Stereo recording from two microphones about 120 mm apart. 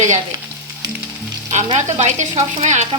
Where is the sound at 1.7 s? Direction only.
80° right.